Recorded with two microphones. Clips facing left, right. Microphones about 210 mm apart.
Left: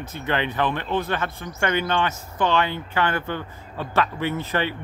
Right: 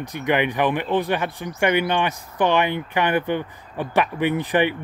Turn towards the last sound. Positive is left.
turn(degrees=-15)  # may be behind; listen again after turning